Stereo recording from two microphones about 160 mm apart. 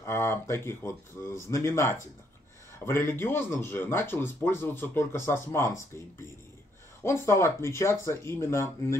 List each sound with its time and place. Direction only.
0.0 s speech: 15° left (ahead or behind)